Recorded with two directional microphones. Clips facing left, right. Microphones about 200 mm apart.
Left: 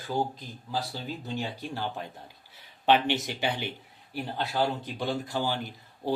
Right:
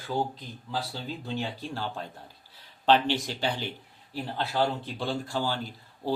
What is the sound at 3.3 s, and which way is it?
Speech, 15° left (ahead or behind).